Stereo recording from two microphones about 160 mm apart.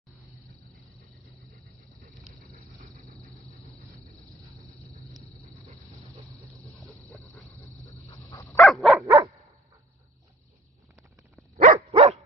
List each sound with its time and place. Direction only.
4.6 s a sound: 20° right (ahead or behind)
5.1 s a sound: centre (ahead or behind)
6.5 s a sound: 20° right (ahead or behind)
7.1 s wild animals: centre (ahead or behind)
8.3 s dog: 20° left (ahead or behind)
8.6 s dog: centre (ahead or behind)
9.0 s dog: 20° right (ahead or behind)
11.5 s dog: 60° right (ahead or behind)
11.9 s dog: 40° right (ahead or behind)